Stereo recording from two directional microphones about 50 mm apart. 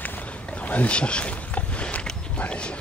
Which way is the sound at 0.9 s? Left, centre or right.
Left.